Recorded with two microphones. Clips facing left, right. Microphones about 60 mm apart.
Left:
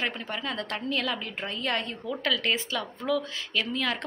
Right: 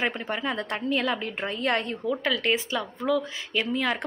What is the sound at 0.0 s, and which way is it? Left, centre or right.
A woman's voice, centre.